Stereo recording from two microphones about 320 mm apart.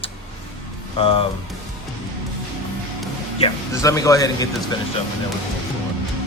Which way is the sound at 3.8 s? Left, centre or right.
Centre.